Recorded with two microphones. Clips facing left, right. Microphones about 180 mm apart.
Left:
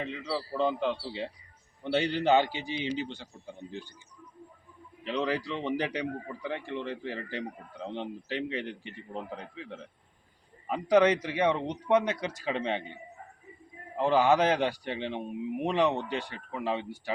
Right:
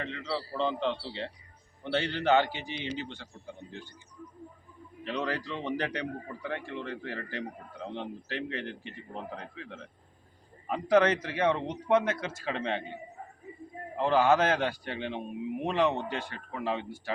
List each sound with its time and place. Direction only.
0.0 s a man's voice: 10° left (ahead or behind)
5.0 s a man's voice: 15° left (ahead or behind)
13.9 s a man's voice: 15° left (ahead or behind)